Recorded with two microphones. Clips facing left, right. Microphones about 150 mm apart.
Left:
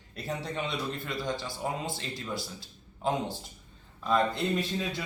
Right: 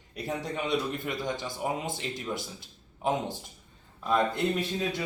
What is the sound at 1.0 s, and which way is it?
A man's voice, 20° right (ahead or behind).